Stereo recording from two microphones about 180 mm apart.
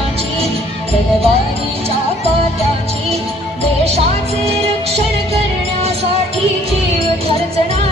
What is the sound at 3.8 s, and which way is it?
Music, 35° right (ahead or behind).